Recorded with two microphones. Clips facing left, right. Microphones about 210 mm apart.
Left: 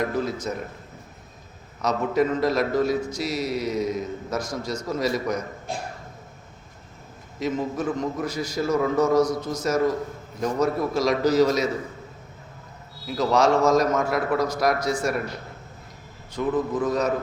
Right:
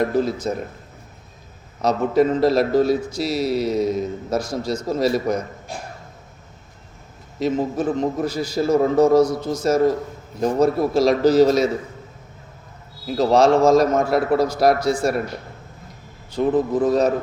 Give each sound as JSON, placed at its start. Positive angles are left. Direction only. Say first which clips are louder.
{"t": 0.4, "sound": "a man's voice", "louder": "right 5 dB", "side_deg": -35}
{"t": 1.8, "sound": "a man's voice", "louder": "right 5 dB", "side_deg": -30}
{"t": 7.3, "sound": "a man's voice", "louder": "right 5 dB", "side_deg": -30}
{"t": 13.1, "sound": "a man's voice", "louder": "right 5 dB", "side_deg": -30}
{"t": 16.3, "sound": "a man's voice", "louder": "right 5 dB", "side_deg": -35}